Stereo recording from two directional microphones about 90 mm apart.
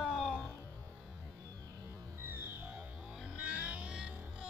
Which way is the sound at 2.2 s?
25° right (ahead or behind).